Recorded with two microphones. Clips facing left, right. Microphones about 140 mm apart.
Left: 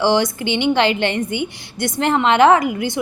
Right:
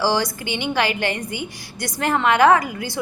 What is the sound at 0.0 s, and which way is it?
A woman's voice, 20° left (ahead or behind).